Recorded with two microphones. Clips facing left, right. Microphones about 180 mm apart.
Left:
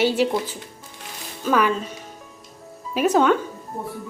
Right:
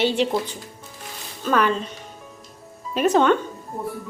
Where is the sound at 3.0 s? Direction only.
5° left (ahead or behind).